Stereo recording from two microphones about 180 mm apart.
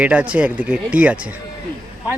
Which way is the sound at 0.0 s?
10° right (ahead or behind).